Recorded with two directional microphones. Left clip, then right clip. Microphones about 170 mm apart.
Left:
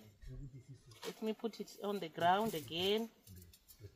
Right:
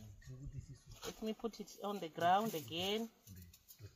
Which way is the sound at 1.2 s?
15° left (ahead or behind).